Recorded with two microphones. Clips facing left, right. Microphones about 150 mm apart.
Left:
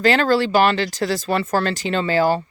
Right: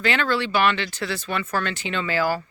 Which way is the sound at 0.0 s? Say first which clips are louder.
Left 7 dB; 35° left (ahead or behind).